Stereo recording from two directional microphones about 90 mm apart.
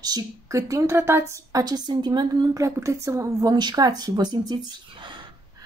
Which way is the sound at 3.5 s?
50° right (ahead or behind).